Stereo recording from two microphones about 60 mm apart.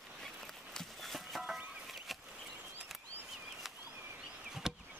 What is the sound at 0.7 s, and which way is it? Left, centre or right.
Walk, centre.